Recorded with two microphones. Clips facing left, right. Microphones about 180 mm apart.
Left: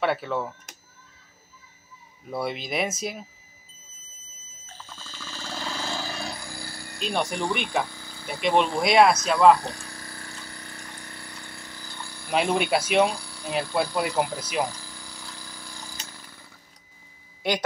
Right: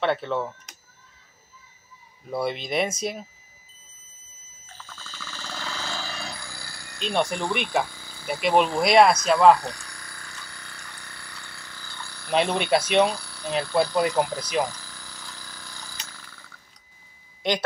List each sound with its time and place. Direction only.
0.0 s speech: 5° left (ahead or behind)
2.3 s speech: centre (ahead or behind)
4.8 s alarm clock: 10° left (ahead or behind)
5.4 s vehicle: 10° left (ahead or behind)
6.2 s a sound: 15° left (ahead or behind)
7.0 s speech: centre (ahead or behind)
9.6 s a sound: 25° left (ahead or behind)
12.3 s speech: 5° left (ahead or behind)
16.1 s a sound: 15° left (ahead or behind)